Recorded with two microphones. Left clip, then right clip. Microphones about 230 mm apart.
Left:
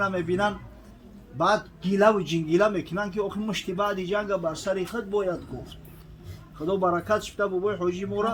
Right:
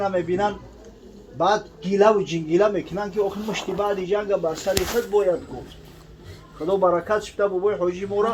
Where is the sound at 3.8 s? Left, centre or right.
Left.